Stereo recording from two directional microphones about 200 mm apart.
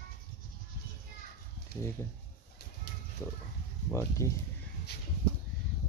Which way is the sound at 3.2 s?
10° left (ahead or behind).